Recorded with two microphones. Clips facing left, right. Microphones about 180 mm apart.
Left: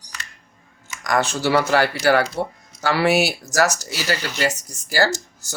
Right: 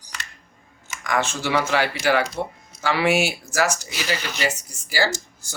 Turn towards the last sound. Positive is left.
turn(degrees=40)  # may be behind; listen again after turning